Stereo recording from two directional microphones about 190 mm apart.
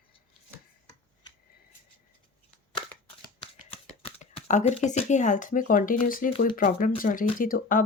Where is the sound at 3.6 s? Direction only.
30° left (ahead or behind).